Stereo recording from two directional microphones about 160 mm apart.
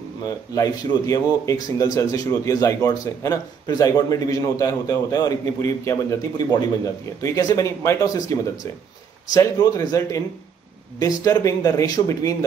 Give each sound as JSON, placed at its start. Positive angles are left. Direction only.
{"t": 0.6, "sound": "a man's voice", "side_deg": 25}